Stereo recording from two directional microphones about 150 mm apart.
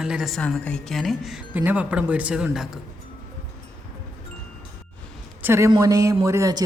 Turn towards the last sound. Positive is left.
turn(degrees=-25)  # may be behind; listen again after turning